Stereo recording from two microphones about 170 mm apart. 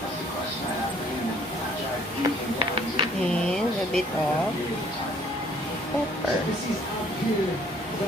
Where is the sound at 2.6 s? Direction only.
30° right (ahead or behind).